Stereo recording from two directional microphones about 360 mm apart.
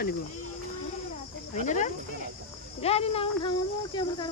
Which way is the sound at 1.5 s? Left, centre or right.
Centre.